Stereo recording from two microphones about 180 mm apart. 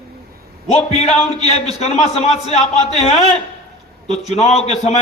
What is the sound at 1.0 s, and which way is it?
A man's voice, 35° left (ahead or behind).